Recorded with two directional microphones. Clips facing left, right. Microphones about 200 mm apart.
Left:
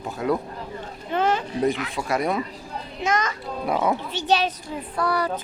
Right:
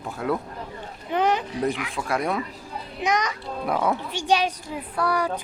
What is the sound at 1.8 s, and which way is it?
Speech, centre (ahead or behind).